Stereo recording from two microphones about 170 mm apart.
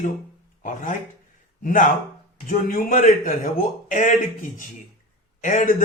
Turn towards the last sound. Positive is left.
turn(degrees=50)  # may be behind; listen again after turning